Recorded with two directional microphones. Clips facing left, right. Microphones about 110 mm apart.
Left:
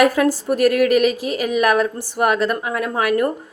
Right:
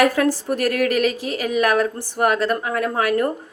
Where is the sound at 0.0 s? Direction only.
15° left (ahead or behind).